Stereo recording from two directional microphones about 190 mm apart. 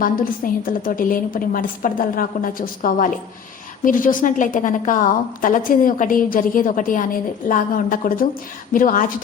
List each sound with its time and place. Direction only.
0.0 s a woman's voice: 45° left (ahead or behind)